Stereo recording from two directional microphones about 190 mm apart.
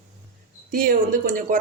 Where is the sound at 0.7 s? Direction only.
45° right (ahead or behind).